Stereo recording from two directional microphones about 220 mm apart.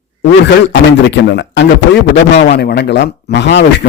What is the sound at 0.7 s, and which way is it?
Speech, 55° left (ahead or behind).